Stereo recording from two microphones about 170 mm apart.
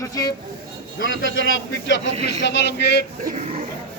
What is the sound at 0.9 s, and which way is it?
A man's voice, 90° left.